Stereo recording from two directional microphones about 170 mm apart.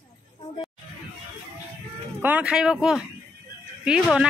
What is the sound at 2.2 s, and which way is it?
Speech, 10° right (ahead or behind).